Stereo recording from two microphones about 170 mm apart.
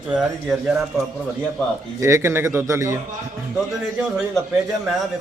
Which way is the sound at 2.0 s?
15° right (ahead or behind).